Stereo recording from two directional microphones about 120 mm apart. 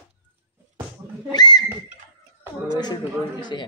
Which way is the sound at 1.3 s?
35° left (ahead or behind).